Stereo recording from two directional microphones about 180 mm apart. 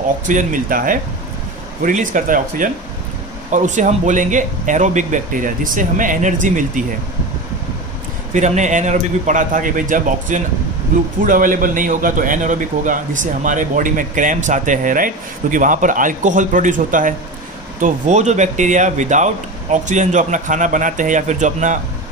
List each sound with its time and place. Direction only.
0.3 s a man's voice: 45° right (ahead or behind)
8.3 s a man's voice: 40° right (ahead or behind)